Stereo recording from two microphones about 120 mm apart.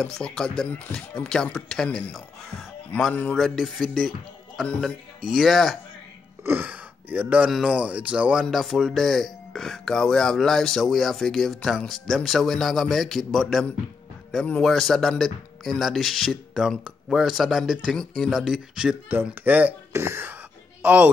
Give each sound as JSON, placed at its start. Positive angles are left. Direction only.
{"t": 0.0, "sound": "speech", "side_deg": 5}
{"t": 3.3, "sound": "speech", "side_deg": 0}
{"t": 6.4, "sound": "speech", "side_deg": -15}
{"t": 19.3, "sound": "speech", "side_deg": -15}